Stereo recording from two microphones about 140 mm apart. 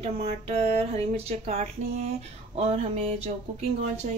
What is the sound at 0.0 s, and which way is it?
A woman's voice, 45° right (ahead or behind).